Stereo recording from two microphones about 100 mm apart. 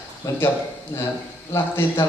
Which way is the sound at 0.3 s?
30° left (ahead or behind).